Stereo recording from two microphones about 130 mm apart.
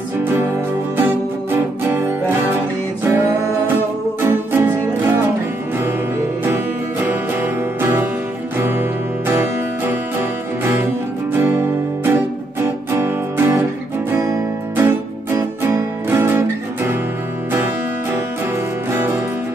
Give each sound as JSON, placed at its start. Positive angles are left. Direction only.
{"t": 0.2, "sound": "music", "side_deg": -20}
{"t": 1.9, "sound": "music", "side_deg": -15}
{"t": 6.5, "sound": "music", "side_deg": -20}
{"t": 9.3, "sound": "music", "side_deg": -15}